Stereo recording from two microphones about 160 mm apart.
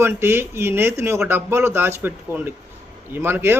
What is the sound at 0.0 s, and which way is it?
A man's voice, 15° right (ahead or behind).